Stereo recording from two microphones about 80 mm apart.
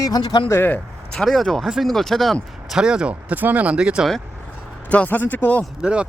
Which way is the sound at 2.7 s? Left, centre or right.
Centre.